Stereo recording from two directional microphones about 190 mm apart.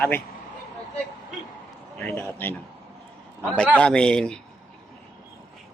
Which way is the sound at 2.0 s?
10° left (ahead or behind).